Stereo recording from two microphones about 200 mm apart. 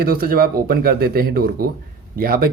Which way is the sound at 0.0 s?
50° right (ahead or behind).